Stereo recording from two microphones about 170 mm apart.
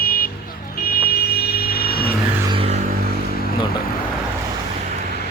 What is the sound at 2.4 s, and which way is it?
Music, 35° right (ahead or behind).